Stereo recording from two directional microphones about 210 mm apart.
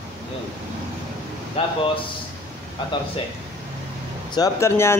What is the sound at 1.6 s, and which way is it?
Speech, 25° left (ahead or behind).